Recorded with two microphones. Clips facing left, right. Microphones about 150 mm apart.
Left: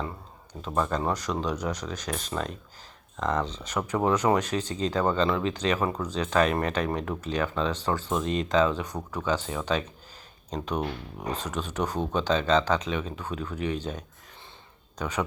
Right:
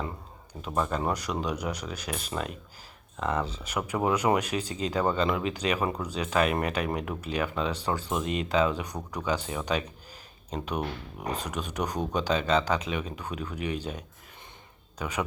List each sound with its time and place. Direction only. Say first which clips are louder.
0.6 s speech: left 1 dB; 10° right (ahead or behind)
8.2 s speech: left 2 dB; 35° left (ahead or behind)
8.4 s speech: left 2 dB; 10° right (ahead or behind)
11.3 s speech: left 1 dB; 10° right (ahead or behind)